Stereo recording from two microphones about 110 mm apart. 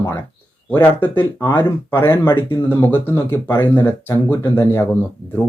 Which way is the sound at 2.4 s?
45° left (ahead or behind).